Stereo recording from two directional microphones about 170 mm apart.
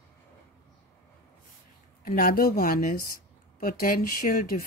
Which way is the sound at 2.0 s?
55° left (ahead or behind).